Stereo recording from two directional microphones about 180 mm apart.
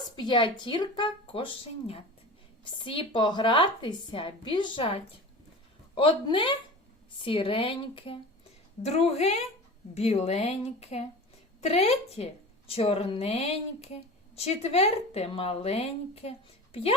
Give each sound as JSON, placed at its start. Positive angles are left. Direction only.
{"t": 0.2, "sound": "a woman's voice", "side_deg": 25}